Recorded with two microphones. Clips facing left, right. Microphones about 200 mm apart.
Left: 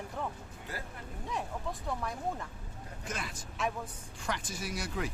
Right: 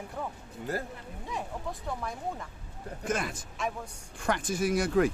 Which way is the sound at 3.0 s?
50° right (ahead or behind).